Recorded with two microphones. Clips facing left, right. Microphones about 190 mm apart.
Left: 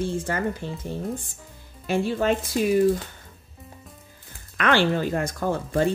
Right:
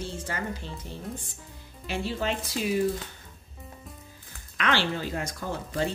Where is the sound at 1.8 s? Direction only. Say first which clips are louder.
Left 7 dB; 50° left (ahead or behind).